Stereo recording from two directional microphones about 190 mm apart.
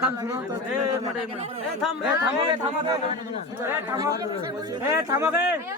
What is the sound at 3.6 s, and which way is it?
Speech, 10° right (ahead or behind).